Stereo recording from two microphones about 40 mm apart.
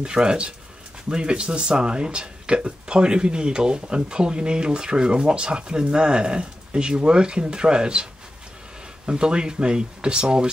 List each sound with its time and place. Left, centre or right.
0.0 s speech: right